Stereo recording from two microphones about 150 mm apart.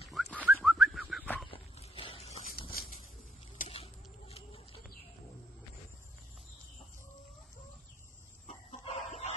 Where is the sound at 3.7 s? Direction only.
40° left (ahead or behind).